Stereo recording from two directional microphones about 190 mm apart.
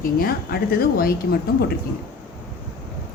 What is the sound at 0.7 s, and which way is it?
Speech, 50° left (ahead or behind).